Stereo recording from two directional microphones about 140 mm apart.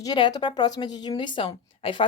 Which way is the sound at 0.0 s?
30° left (ahead or behind).